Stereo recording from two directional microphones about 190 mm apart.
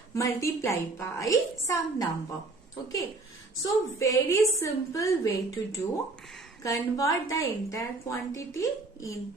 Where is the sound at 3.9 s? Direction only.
15° left (ahead or behind).